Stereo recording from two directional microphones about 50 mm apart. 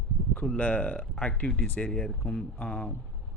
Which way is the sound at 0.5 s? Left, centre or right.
Left.